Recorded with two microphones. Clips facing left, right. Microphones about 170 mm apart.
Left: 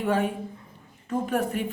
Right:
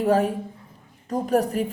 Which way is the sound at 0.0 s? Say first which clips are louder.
Right 5 dB; 40° right (ahead or behind).